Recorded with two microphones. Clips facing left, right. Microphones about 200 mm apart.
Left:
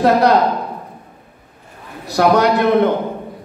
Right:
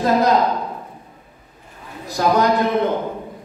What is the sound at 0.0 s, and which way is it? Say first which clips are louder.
Speech: left 4 dB; 70° left (ahead or behind).